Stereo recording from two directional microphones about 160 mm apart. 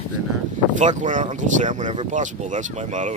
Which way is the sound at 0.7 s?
50° right (ahead or behind).